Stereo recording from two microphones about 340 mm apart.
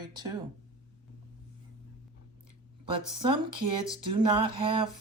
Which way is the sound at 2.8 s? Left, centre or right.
Centre.